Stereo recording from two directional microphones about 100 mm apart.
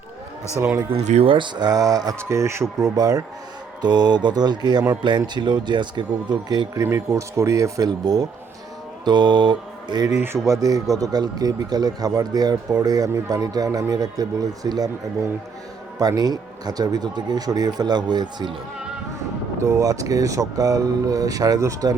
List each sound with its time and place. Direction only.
0.9 s speech: 80° right; by 2.1 s 40° right (ahead or behind)
2.1 s speech: 25° right (ahead or behind)
2.8 s speech: 40° right (ahead or behind)
6.7 s speech: 30° right (ahead or behind)
9.0 s mantra: 45° right (ahead or behind)
10.2 s speech: 25° right (ahead or behind)
16.0 s speech: 40° right (ahead or behind)
19.6 s speech: 35° right (ahead or behind)